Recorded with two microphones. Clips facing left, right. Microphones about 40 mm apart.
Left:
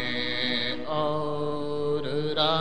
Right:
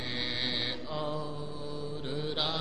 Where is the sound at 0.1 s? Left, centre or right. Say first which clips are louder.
Left 6 dB; left.